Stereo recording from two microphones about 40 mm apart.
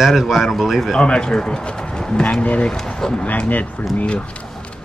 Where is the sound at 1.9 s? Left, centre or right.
Centre.